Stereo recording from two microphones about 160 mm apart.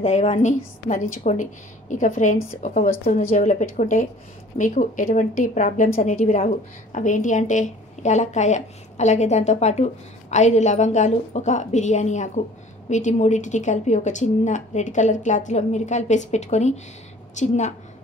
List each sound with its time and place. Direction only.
0.0 s a woman's voice: 45° left (ahead or behind)